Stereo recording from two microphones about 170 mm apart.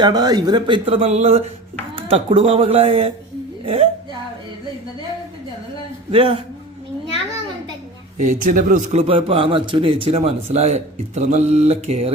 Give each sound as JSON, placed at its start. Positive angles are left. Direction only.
{"t": 0.0, "sound": "a man's voice", "side_deg": -25}
{"t": 6.1, "sound": "a man's voice", "side_deg": -35}
{"t": 8.2, "sound": "a man's voice", "side_deg": -50}